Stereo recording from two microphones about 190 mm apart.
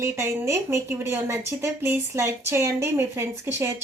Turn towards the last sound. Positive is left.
turn(degrees=-15)  # may be behind; listen again after turning